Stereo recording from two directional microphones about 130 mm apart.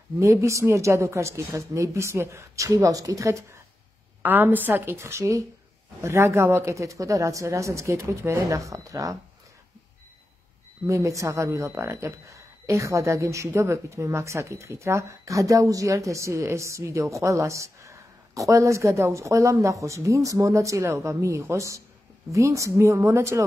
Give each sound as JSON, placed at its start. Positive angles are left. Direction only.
{"t": 0.2, "sound": "a woman's voice", "side_deg": -25}
{"t": 10.9, "sound": "speech", "side_deg": -25}